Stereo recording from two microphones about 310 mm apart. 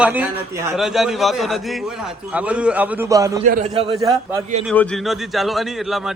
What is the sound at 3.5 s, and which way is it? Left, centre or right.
Speech, right.